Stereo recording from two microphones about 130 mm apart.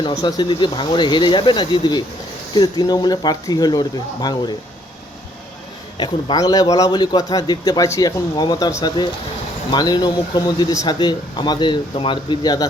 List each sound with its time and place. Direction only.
0.2 s speech: 30° left (ahead or behind)
6.0 s a man's voice: 30° left (ahead or behind)
9.7 s speech: 30° left (ahead or behind)